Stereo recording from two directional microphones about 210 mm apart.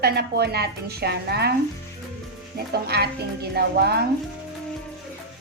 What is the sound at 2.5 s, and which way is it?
A woman's voice, 50° right (ahead or behind).